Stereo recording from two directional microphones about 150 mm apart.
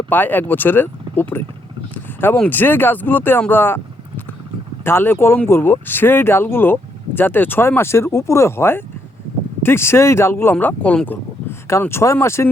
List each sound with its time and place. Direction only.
0.1 s speech: 10° left (ahead or behind)
4.9 s speech: 15° left (ahead or behind)